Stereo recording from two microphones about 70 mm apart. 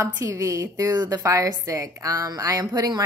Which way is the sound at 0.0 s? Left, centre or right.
Right.